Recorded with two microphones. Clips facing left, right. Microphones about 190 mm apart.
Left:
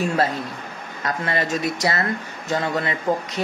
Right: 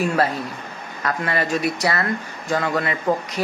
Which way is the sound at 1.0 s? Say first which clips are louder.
Right 1 dB; 25° left (ahead or behind).